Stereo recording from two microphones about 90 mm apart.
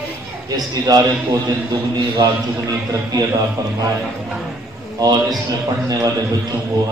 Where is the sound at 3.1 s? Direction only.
40° right (ahead or behind).